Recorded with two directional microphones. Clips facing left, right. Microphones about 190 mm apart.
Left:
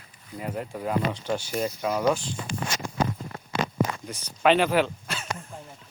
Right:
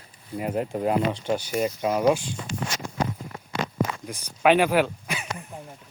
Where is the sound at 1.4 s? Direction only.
5° right (ahead or behind).